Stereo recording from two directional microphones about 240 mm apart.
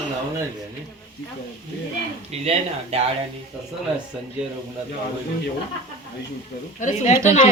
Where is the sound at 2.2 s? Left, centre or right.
Right.